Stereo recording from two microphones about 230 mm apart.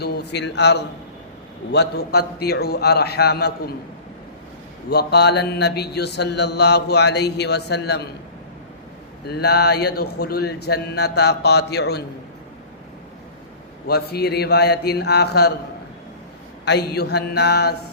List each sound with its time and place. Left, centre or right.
0.0 s mantra: left
4.9 s mantra: left
9.2 s mantra: left
13.8 s mantra: left
16.6 s mantra: left